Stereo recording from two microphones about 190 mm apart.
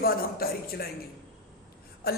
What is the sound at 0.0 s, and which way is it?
Speech, 55° left (ahead or behind).